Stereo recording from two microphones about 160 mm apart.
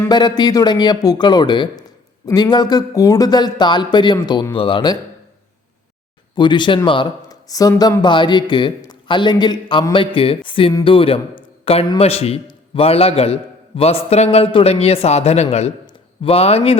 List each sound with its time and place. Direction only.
0.1 s speech: 25° left (ahead or behind)
6.3 s a man's voice: 30° left (ahead or behind)